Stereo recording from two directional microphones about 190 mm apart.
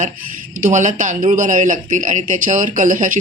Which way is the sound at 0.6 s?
40° right (ahead or behind).